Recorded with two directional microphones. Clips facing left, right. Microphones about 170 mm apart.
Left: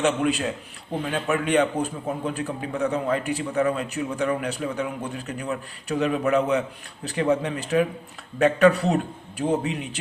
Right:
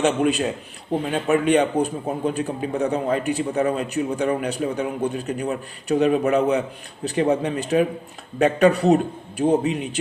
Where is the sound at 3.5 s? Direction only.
35° right (ahead or behind); by 6.4 s 20° right (ahead or behind).